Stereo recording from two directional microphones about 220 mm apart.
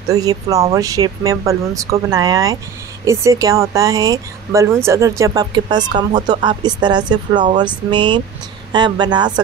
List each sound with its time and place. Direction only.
0.1 s speech: 15° right (ahead or behind)